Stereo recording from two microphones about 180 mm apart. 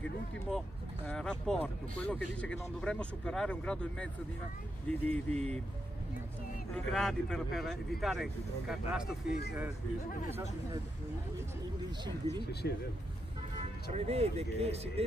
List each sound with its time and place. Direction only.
1.0 s speech: 5° left (ahead or behind)
6.7 s speech: 5° left (ahead or behind)
12.2 s speech: 15° left (ahead or behind)
12.6 s speech: 65° left (ahead or behind)
13.9 s speech: 35° right (ahead or behind)